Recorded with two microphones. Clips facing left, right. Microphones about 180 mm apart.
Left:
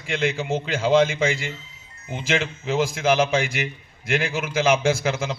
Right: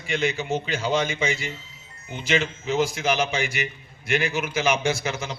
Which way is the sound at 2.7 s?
90° left.